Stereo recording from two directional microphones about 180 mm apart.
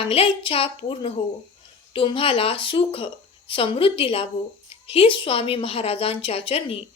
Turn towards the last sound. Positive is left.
turn(degrees=35)  # may be behind; listen again after turning